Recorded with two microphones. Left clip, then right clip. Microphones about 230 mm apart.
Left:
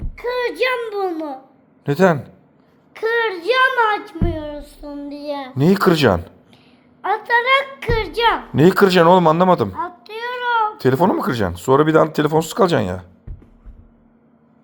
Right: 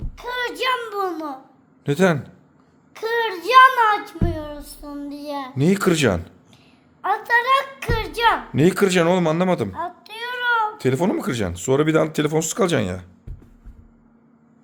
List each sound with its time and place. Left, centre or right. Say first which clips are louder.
0.2 s speech: left 5 dB; centre
1.8 s speech: left 4 dB; centre
2.9 s speech: left 4 dB; right
5.5 s speech: left 4 dB; centre
7.0 s speech: left 2 dB; right
8.5 s speech: left 5 dB; centre
10.1 s child singing: left 1 dB; centre
10.8 s speech: left 5 dB; centre